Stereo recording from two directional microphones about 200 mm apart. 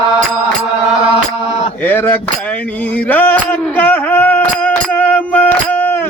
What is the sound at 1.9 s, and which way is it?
Cutlery, 10° left (ahead or behind).